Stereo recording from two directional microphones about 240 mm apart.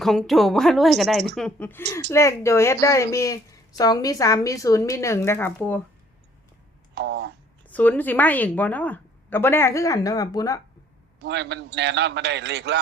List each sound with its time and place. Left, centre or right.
0.0 s a woman's voice: centre
6.9 s a man's voice: right
7.7 s a woman's voice: centre
11.2 s a man's voice: right